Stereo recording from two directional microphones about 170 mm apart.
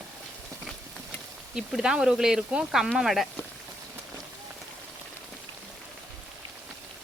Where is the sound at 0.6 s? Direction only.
Centre (ahead or behind).